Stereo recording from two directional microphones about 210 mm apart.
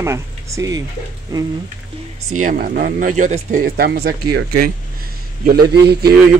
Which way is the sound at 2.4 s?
45° right (ahead or behind).